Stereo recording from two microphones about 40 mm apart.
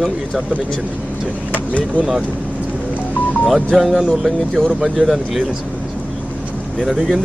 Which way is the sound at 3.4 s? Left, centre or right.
Centre.